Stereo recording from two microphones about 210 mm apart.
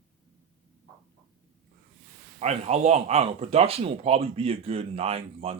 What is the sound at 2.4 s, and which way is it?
Speech, 30° right (ahead or behind).